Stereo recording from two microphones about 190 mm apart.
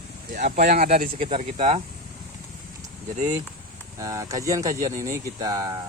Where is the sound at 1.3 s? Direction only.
35° right (ahead or behind).